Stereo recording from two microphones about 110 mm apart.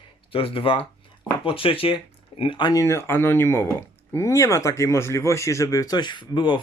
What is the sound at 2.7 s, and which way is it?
Speech, 30° left (ahead or behind).